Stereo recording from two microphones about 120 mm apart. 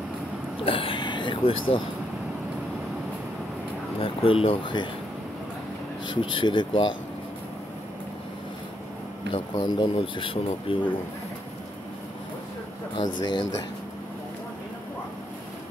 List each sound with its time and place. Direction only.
0.7 s a sound: 50° left (ahead or behind)
4.0 s speech: 50° left (ahead or behind)
6.3 s speech: 40° left (ahead or behind)
9.3 s speech: 40° left (ahead or behind)
13.2 s speech: 40° left (ahead or behind)